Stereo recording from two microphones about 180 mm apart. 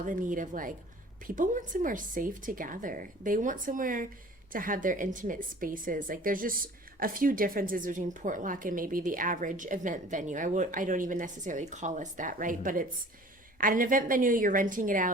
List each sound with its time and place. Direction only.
0.0 s a woman's voice: 45° right (ahead or behind)